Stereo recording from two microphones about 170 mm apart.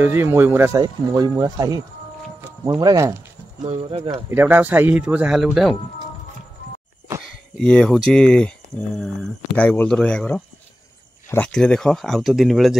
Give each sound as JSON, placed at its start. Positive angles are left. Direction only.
{"t": 0.0, "sound": "speech", "side_deg": -15}
{"t": 3.6, "sound": "speech", "side_deg": -30}
{"t": 4.3, "sound": "speech", "side_deg": -10}
{"t": 7.5, "sound": "speech", "side_deg": 5}